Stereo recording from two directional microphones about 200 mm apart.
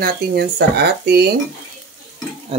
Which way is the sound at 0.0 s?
50° right (ahead or behind).